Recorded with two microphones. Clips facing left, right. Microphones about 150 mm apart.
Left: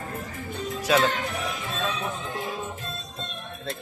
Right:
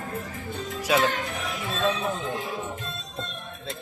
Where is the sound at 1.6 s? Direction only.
20° right (ahead or behind).